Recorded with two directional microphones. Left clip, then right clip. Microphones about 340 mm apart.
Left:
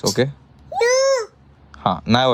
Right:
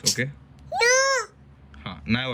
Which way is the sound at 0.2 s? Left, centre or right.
Left.